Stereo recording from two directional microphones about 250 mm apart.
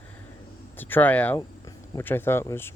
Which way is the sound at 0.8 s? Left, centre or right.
Centre.